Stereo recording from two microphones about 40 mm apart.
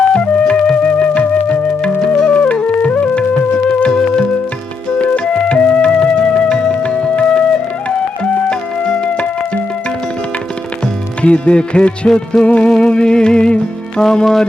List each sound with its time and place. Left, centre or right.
0.1 s music: left
4.9 s music: left
11.2 s music: left; by 14.4 s centre